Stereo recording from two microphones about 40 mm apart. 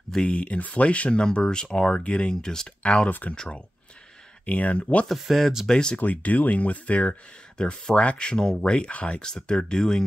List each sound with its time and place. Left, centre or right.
0.2 s speech: left
1.3 s speech: left
2.3 s speech: centre
2.8 s speech: left
4.5 s speech: left
5.2 s speech: centre
5.7 s speech: centre
5.9 s speech: left
7.5 s speech: left
7.9 s speech: left
9.2 s speech: centre